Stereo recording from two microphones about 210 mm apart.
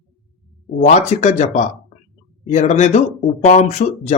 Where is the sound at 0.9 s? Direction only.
35° left (ahead or behind).